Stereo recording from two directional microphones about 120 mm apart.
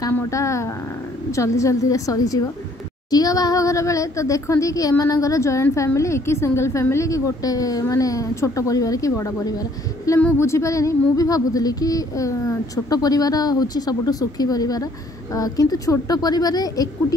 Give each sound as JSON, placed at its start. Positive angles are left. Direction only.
{"t": 0.3, "sound": "speech", "side_deg": 25}